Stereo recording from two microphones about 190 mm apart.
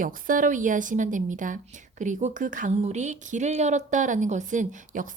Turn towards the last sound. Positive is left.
turn(degrees=-40)  # may be behind; listen again after turning